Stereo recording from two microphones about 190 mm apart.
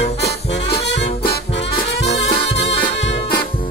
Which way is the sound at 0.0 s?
60° left (ahead or behind).